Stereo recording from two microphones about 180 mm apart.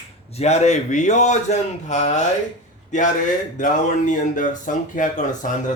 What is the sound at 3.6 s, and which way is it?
A man's voice, 45° left (ahead or behind).